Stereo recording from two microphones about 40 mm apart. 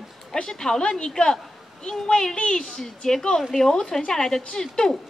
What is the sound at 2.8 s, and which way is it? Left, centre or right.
A woman's voice, centre.